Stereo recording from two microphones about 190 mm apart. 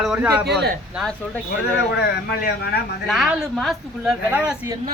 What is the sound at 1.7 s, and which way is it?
Speech, 60° left (ahead or behind).